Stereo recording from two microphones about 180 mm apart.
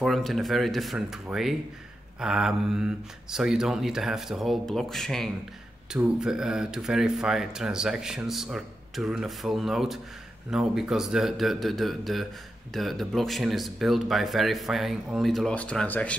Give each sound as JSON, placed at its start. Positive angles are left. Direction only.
{"t": 0.0, "sound": "speech", "side_deg": 0}